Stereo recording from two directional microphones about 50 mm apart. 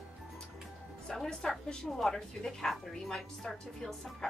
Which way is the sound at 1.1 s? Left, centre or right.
Centre.